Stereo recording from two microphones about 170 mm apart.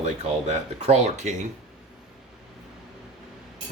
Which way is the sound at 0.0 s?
40° right (ahead or behind).